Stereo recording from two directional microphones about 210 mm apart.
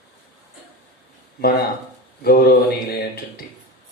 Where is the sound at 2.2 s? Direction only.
45° left (ahead or behind).